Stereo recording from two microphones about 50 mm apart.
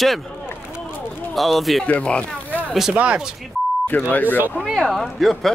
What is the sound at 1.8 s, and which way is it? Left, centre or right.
Speech, left.